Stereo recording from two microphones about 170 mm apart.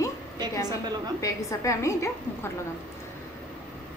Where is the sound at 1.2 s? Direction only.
20° left (ahead or behind).